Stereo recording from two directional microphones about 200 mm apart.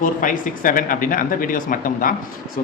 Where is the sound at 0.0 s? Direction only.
40° left (ahead or behind).